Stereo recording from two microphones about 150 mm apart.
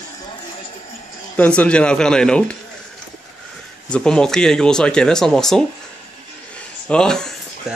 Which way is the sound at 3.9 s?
5° left (ahead or behind).